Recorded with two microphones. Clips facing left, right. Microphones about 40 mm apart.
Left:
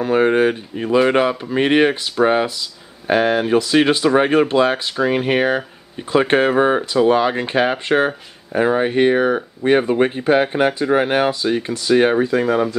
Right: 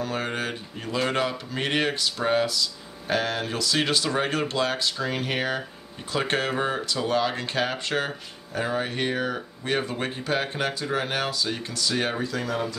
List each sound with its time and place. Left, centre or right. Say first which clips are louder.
0.0 s speech: left 14 dB; left